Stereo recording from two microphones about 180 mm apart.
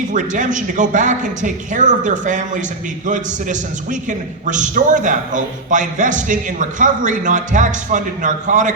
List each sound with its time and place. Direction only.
0.1 s a man's voice: 45° right (ahead or behind)